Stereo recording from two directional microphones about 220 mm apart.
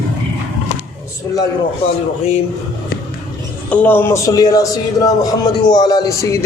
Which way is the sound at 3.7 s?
10° left (ahead or behind).